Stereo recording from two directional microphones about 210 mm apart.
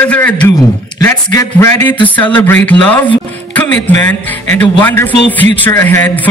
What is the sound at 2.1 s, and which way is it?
A man's voice, 10° left (ahead or behind).